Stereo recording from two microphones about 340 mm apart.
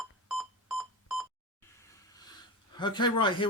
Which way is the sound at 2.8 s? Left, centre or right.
Centre.